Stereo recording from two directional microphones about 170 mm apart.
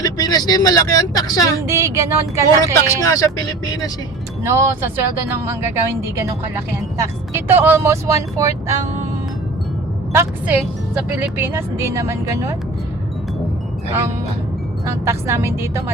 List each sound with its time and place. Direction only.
0.0 s speech: 25° left (ahead or behind)
1.6 s speech: 15° right (ahead or behind)
2.7 s speech: 20° left (ahead or behind)
4.4 s speech: 15° right (ahead or behind)
10.1 s speech: 15° right (ahead or behind)
14.8 s speech: 15° right (ahead or behind)